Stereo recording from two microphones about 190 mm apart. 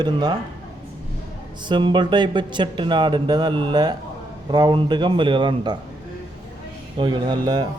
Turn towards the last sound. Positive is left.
turn(degrees=-25)  # may be behind; listen again after turning